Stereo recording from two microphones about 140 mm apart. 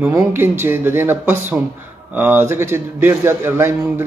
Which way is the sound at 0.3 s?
15° right (ahead or behind).